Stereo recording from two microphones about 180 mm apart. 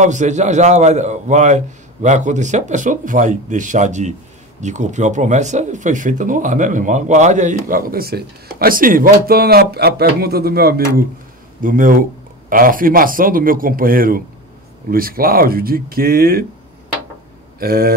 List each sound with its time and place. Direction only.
0.0 s speech: 40° right (ahead or behind)
17.6 s speech: 55° right (ahead or behind)